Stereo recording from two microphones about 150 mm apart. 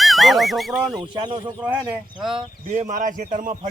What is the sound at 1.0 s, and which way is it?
Speech, 30° right (ahead or behind).